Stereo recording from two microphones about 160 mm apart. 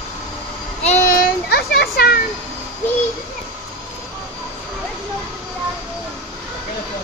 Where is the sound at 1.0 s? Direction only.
85° left.